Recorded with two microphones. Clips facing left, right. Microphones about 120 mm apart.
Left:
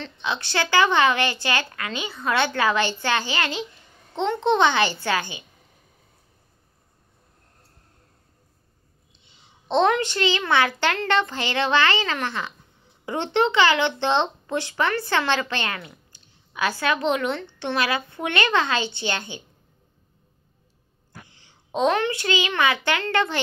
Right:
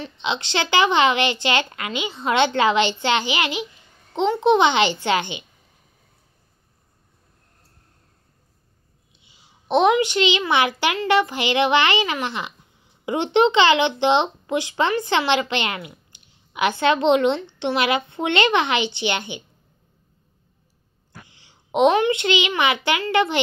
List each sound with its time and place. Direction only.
0.0 s a woman's voice: 20° right (ahead or behind)
9.1 s a sound: 5° right (ahead or behind)
10.5 s speech: 15° right (ahead or behind)
17.4 s a woman's voice: 15° right (ahead or behind)
21.3 s a sound: 50° left (ahead or behind)
21.7 s a woman's voice: 15° right (ahead or behind)